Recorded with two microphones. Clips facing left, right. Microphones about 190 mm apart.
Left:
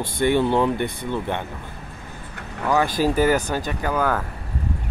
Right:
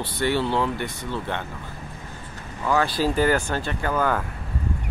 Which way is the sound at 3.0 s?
10° left (ahead or behind).